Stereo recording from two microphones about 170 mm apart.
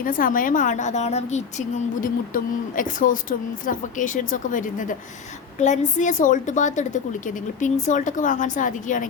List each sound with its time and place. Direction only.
0.0 s a woman's voice: 55° left (ahead or behind)